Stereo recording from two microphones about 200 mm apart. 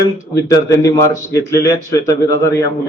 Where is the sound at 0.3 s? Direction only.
15° left (ahead or behind).